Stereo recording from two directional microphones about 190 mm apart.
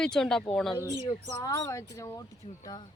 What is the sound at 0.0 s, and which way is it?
Speech, 5° left (ahead or behind).